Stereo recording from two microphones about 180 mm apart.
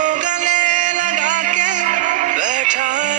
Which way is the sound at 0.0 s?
45° right (ahead or behind).